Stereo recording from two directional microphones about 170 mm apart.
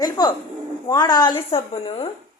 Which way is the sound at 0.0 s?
25° left (ahead or behind).